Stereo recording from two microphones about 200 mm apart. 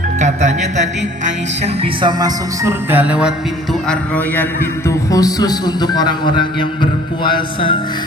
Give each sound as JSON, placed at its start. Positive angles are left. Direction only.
{"t": 0.2, "sound": "speech", "side_deg": -35}
{"t": 1.2, "sound": "music", "side_deg": -30}
{"t": 3.8, "sound": "a man's voice", "side_deg": 5}
{"t": 4.9, "sound": "a man's voice", "side_deg": 15}